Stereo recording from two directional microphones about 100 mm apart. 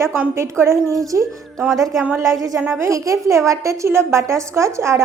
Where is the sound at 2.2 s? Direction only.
30° right (ahead or behind).